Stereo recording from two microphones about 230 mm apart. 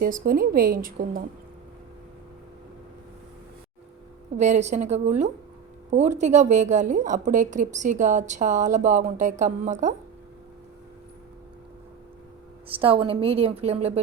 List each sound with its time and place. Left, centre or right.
0.0 s a woman's voice: right
4.4 s a woman's voice: right
12.6 s a woman's voice: right